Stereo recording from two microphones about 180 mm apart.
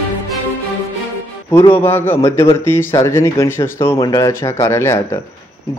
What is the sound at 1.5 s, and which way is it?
Speech, 15° left (ahead or behind).